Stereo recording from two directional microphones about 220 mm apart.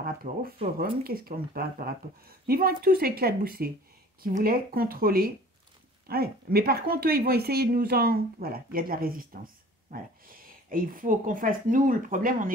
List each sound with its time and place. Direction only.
0.0 s a woman's voice: 40° right (ahead or behind)